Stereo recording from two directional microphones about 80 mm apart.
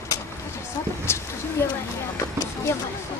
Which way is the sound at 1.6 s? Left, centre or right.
Left.